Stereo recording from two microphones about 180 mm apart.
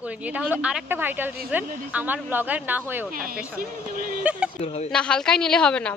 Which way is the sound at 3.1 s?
55° right (ahead or behind).